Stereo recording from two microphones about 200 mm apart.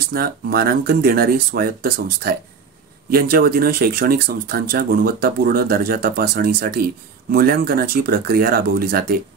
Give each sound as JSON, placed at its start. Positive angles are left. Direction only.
{"t": 0.0, "sound": "speech", "side_deg": -50}